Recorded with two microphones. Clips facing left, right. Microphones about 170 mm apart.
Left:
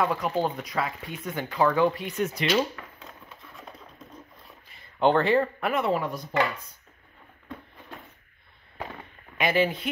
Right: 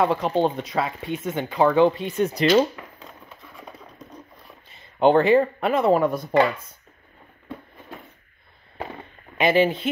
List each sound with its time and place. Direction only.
0.0 s speech: 25° right (ahead or behind)
4.6 s a sound: 25° right (ahead or behind)
5.8 s speech: 45° right (ahead or behind)
9.4 s speech: 25° right (ahead or behind)